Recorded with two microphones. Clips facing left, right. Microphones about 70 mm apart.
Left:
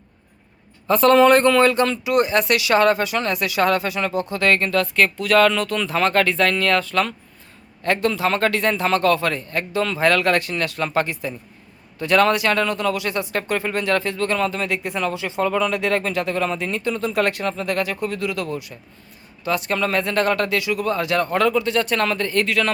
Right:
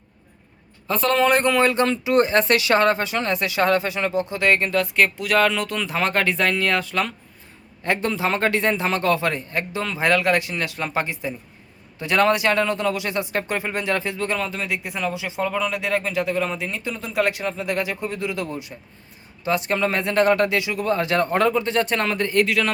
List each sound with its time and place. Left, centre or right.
0.9 s speech: centre
1.3 s a man's voice: centre